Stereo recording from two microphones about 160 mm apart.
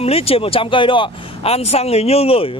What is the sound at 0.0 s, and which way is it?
Speech, 40° left (ahead or behind).